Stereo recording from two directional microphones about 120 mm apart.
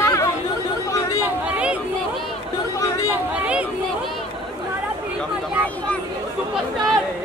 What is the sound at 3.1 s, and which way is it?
Speech, 10° right (ahead or behind).